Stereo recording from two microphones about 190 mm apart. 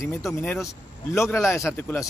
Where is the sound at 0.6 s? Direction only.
15° left (ahead or behind).